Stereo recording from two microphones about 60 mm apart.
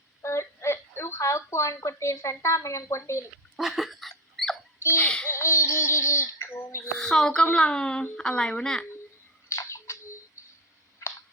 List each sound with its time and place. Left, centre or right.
0.2 s a woman's voice: left
3.6 s dog: centre
4.9 s a child's voice: centre
5.3 s a sound: left
7.0 s speech: centre
9.5 s a sound: left